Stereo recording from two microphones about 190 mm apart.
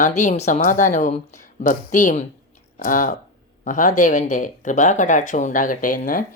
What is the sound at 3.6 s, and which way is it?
Music, 40° left (ahead or behind).